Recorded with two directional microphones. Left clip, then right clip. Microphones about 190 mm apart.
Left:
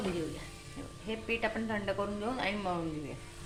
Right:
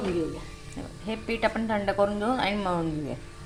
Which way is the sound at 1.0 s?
20° right (ahead or behind).